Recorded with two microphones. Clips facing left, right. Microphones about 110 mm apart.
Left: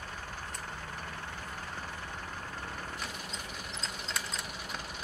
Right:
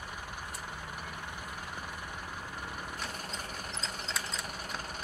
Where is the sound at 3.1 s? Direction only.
45° right (ahead or behind).